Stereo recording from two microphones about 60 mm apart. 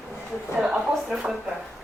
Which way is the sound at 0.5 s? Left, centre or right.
Centre.